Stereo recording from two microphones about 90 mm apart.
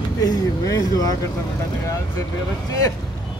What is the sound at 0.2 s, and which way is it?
Speech, 40° left (ahead or behind).